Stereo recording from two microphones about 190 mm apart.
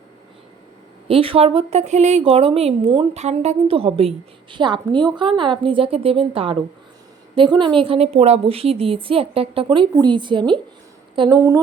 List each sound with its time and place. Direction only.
1.0 s a woman's voice: 30° right (ahead or behind)